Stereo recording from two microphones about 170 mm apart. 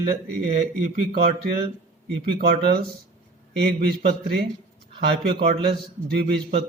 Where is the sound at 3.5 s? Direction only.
70° right (ahead or behind).